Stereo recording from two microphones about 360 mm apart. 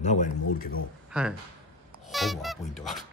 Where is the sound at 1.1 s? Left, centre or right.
Centre.